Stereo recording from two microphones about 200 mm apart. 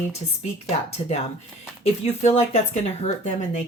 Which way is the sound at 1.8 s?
35° left (ahead or behind).